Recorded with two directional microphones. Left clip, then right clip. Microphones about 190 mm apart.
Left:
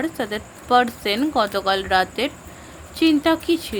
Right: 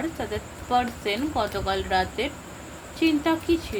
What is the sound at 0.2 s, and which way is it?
Speech, 60° left (ahead or behind).